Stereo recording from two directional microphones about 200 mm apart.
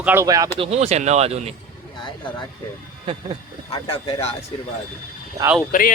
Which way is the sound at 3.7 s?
25° left (ahead or behind).